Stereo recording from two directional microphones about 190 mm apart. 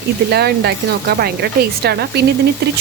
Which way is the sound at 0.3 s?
60° right (ahead or behind).